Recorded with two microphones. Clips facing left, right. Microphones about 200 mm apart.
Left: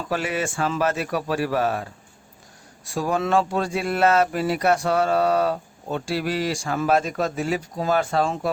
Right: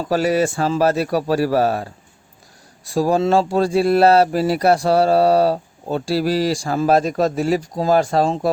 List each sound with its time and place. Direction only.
0.0 s speech: 35° right (ahead or behind)